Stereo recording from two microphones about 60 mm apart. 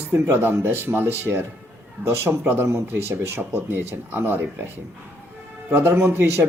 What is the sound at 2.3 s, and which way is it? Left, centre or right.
Speech, right.